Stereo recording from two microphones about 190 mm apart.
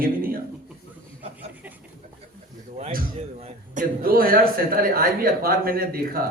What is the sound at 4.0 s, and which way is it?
A man's voice, 50° right (ahead or behind).